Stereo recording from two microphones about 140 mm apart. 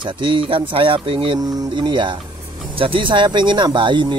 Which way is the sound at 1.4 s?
25° right (ahead or behind).